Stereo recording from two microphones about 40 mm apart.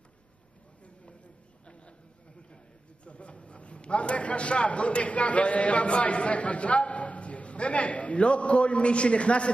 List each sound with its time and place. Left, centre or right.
3.1 s a man's voice: left